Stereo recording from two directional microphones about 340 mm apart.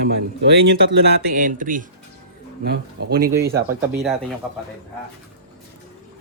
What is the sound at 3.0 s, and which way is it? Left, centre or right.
Speech, right.